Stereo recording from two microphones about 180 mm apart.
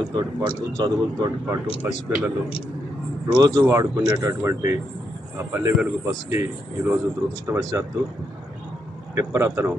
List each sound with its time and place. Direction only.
0.1 s speech: 25° right (ahead or behind)
1.8 s speech: 10° right (ahead or behind)
3.3 s speech: 25° right (ahead or behind)
9.1 s speech: 15° right (ahead or behind)